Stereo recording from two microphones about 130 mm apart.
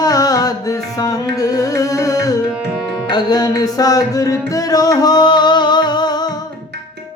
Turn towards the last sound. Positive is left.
turn(degrees=30)  # may be behind; listen again after turning